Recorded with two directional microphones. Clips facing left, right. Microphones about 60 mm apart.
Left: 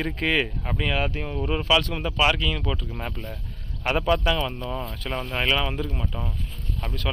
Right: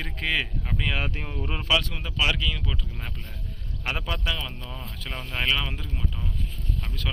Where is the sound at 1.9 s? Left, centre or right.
Centre.